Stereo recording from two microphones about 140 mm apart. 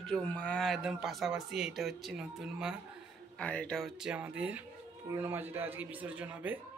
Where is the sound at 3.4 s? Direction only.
10° left (ahead or behind).